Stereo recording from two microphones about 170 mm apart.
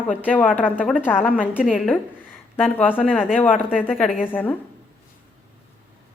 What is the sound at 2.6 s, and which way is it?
A woman's voice, 10° left (ahead or behind).